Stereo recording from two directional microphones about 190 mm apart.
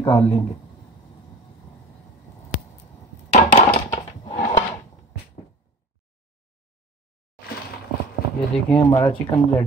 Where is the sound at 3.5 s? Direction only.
35° left (ahead or behind).